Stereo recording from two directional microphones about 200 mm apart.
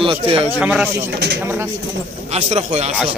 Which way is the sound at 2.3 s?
35° right (ahead or behind).